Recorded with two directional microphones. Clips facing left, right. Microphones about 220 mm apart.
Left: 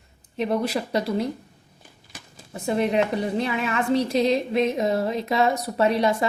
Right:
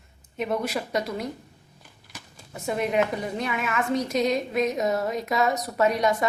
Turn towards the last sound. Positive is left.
turn(degrees=30)  # may be behind; listen again after turning